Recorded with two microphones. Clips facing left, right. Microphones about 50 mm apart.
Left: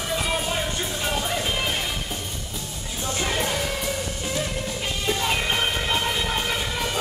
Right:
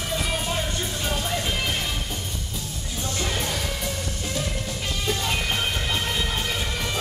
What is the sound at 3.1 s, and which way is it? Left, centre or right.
Music, centre.